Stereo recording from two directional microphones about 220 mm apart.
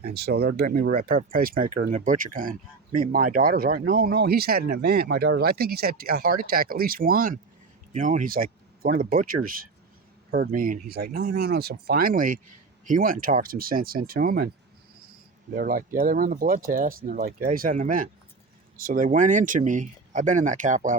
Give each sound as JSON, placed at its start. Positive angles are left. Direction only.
{"t": 0.1, "sound": "speech", "side_deg": -45}
{"t": 15.5, "sound": "speech", "side_deg": -40}